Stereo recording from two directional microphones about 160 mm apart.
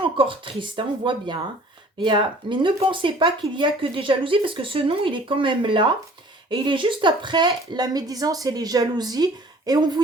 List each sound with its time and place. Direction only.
0.0 s a woman's voice: 35° right (ahead or behind)